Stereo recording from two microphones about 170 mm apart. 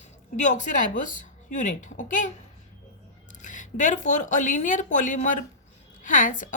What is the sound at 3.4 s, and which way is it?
Speech, 50° left (ahead or behind).